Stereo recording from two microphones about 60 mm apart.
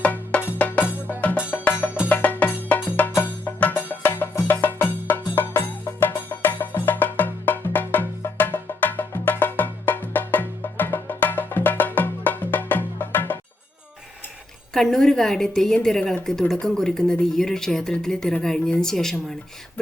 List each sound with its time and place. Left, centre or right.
0.0 s music: left
14.7 s speech: centre